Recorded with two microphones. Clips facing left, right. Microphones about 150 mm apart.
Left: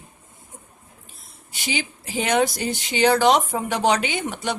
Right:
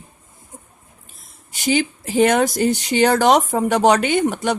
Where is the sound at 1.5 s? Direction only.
45° right (ahead or behind).